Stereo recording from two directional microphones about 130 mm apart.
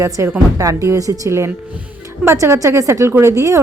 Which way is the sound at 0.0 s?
20° right (ahead or behind).